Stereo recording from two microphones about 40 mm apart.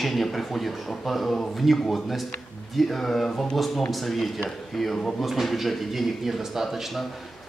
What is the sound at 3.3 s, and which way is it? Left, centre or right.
Speech, centre.